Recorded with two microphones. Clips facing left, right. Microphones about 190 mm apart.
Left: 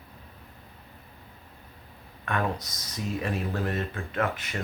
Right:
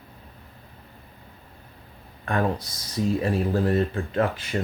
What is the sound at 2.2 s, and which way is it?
Speech, 30° right (ahead or behind).